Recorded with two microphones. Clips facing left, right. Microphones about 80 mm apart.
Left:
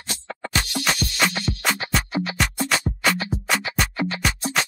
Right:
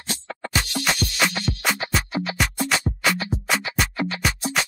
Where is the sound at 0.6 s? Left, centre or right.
Centre.